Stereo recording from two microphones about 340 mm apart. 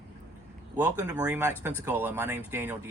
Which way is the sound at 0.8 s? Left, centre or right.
Centre.